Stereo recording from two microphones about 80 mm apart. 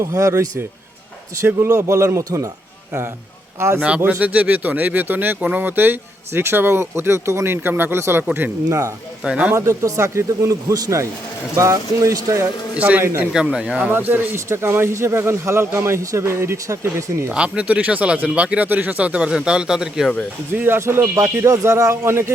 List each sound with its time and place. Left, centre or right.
0.0 s speech: right
1.4 s speech: right
3.8 s speech: centre
9.2 s speech: centre
9.6 s speech: right
12.7 s a man's voice: centre
13.9 s speech: right
14.3 s speech: right
17.3 s speech: centre
20.6 s speech: right